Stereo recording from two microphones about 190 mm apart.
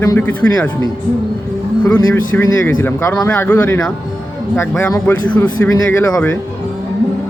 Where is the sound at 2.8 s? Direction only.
10° left (ahead or behind).